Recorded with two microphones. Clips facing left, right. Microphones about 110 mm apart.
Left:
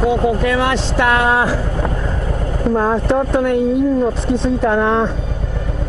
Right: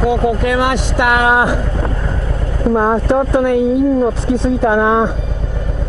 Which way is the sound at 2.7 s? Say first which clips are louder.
Right 2 dB; 15° right (ahead or behind).